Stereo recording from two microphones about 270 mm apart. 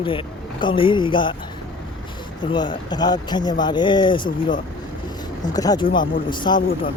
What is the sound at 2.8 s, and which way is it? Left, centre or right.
Speech, centre.